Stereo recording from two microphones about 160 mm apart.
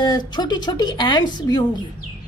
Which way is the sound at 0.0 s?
25° left (ahead or behind).